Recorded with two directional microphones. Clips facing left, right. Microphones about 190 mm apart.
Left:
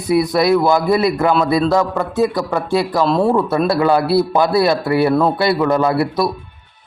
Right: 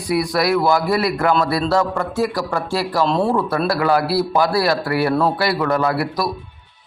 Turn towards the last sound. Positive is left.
turn(degrees=25)  # may be behind; listen again after turning